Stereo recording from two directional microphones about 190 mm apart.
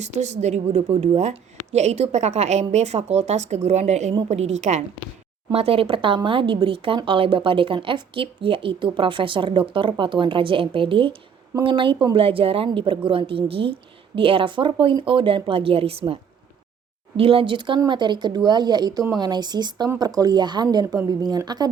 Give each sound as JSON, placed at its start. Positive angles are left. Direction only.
{"t": 0.0, "sound": "a woman's voice", "side_deg": -35}
{"t": 17.2, "sound": "a woman's voice", "side_deg": -30}